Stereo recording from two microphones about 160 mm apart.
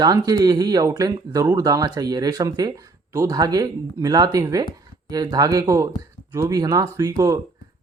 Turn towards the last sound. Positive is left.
turn(degrees=-20)  # may be behind; listen again after turning